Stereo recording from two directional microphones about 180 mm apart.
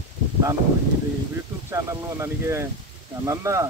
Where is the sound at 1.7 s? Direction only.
15° right (ahead or behind).